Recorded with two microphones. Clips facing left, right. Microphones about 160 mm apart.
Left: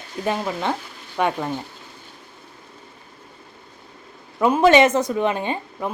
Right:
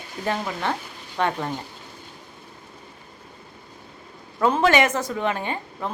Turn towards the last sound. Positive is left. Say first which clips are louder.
# left 3 dB
turn(degrees=20)  # may be behind; listen again after turning